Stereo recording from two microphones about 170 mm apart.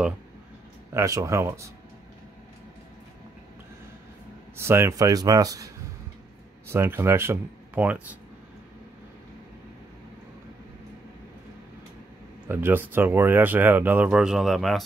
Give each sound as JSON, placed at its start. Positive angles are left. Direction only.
{"t": 0.9, "sound": "speech", "side_deg": -20}
{"t": 4.6, "sound": "speech", "side_deg": -15}
{"t": 6.7, "sound": "speech", "side_deg": -15}
{"t": 12.4, "sound": "speech", "side_deg": -10}